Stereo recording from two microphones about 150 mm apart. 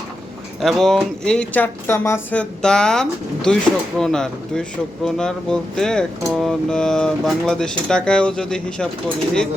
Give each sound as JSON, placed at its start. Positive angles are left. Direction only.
{"t": 0.6, "sound": "speech", "side_deg": 0}